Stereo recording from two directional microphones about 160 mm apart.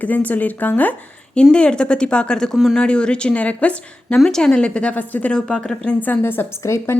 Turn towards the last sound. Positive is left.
turn(degrees=15)  # may be behind; listen again after turning